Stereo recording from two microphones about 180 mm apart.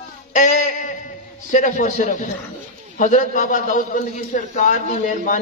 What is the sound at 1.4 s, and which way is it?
A man's voice, 45° left (ahead or behind).